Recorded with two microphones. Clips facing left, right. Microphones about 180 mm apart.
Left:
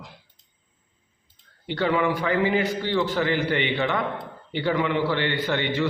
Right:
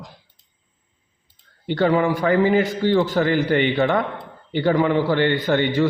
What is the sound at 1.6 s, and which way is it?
A man's voice, 40° right (ahead or behind).